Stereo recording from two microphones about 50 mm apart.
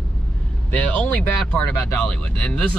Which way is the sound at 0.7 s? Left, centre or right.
Left.